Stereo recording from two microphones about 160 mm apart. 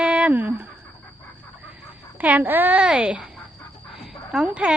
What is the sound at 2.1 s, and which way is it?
Speech, 10° right (ahead or behind).